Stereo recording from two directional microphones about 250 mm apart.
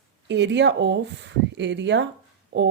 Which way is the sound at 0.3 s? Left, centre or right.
Right.